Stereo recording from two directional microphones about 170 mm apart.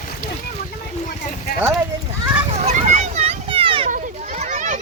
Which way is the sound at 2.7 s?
45° right (ahead or behind).